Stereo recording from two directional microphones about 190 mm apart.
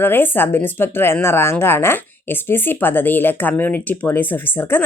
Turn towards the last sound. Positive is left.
turn(degrees=10)  # may be behind; listen again after turning